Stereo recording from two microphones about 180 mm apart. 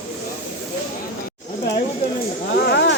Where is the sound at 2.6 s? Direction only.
70° left (ahead or behind).